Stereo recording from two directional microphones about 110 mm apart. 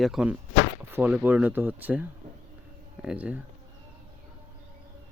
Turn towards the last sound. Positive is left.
turn(degrees=-15)  # may be behind; listen again after turning